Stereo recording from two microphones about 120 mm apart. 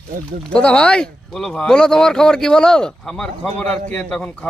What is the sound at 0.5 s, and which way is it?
Speech, 5° left (ahead or behind).